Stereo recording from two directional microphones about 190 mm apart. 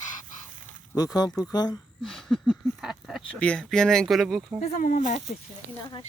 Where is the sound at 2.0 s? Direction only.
5° left (ahead or behind).